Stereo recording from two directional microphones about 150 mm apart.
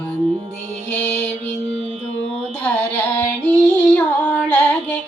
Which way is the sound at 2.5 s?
10° left (ahead or behind).